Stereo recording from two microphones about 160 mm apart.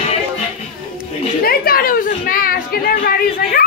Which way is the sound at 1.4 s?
70° left (ahead or behind).